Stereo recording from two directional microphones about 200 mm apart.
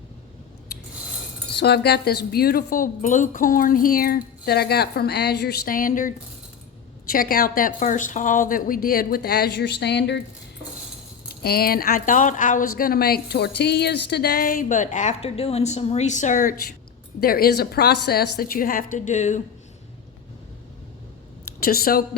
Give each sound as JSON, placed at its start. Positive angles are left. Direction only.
{"t": 1.5, "sound": "speech", "side_deg": 55}
{"t": 11.4, "sound": "speech", "side_deg": 50}
{"t": 21.6, "sound": "speech", "side_deg": 50}